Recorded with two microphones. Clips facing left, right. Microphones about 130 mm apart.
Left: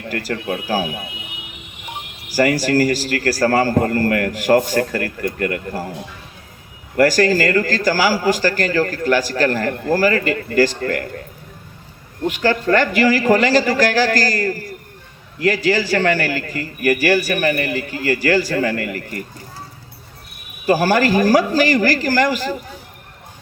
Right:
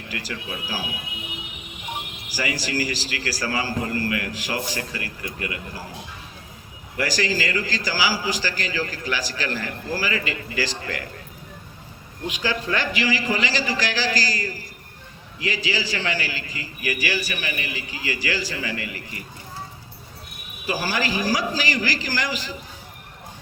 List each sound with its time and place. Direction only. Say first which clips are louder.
0.1 s a man's voice: left 10 dB; 50° left (ahead or behind)
2.3 s a man's voice: left 11 dB; 50° left (ahead or behind)
6.9 s a man's voice: left 10 dB; 50° left (ahead or behind)
12.2 s a man's voice: left 9 dB; 50° left (ahead or behind)
20.7 s a man's voice: left 10 dB; 50° left (ahead or behind)